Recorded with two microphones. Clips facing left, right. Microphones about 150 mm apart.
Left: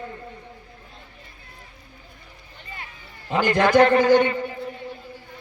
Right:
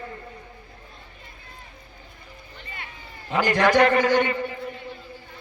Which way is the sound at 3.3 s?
25° left (ahead or behind).